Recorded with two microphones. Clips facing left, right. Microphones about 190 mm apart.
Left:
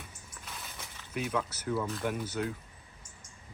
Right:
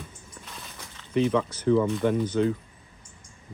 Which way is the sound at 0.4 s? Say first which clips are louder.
Right 1 dB; 5° left (ahead or behind).